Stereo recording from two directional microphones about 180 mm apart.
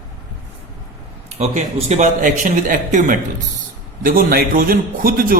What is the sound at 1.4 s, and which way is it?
A man's voice, 40° right (ahead or behind).